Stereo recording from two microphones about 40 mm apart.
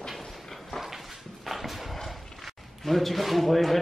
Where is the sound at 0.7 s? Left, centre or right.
Centre.